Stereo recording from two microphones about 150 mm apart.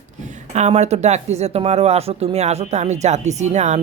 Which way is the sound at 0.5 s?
50° right (ahead or behind).